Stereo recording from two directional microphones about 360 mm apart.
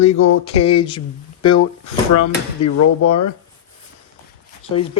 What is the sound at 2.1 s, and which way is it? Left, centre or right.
Speech, left.